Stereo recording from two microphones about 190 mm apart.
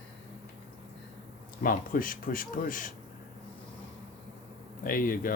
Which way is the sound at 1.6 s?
45° left (ahead or behind).